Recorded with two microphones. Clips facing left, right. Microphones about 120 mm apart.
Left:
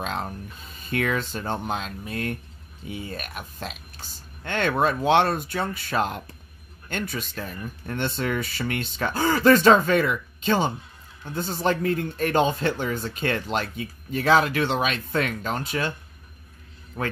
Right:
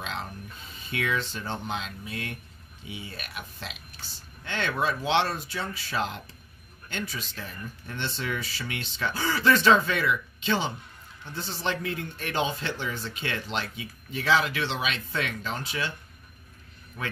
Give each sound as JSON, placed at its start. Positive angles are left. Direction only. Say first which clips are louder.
{"t": 0.0, "sound": "music", "louder": "left 6 dB", "side_deg": 45}
{"t": 0.8, "sound": "speech", "louder": "left 4 dB", "side_deg": 45}
{"t": 17.0, "sound": "speech", "louder": "left 6 dB", "side_deg": 40}